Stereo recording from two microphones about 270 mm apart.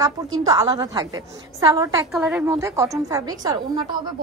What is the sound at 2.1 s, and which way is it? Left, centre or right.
A woman's voice, centre.